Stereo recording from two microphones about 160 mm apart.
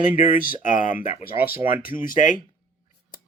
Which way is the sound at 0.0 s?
60° left (ahead or behind).